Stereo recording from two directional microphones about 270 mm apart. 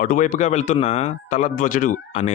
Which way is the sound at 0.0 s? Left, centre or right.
Left.